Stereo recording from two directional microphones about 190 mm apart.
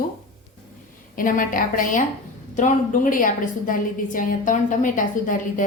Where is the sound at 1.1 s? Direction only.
45° left (ahead or behind).